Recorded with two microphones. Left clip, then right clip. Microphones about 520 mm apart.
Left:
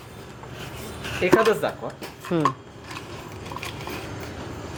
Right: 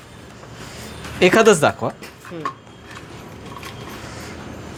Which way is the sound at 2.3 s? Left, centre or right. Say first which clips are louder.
Left 10 dB; left.